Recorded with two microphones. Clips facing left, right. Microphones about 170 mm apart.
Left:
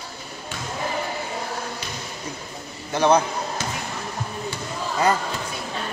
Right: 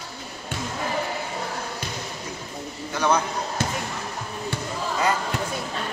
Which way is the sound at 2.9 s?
25° left (ahead or behind).